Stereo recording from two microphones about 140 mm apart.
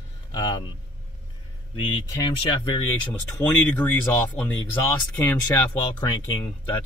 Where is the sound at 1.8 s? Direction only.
35° left (ahead or behind).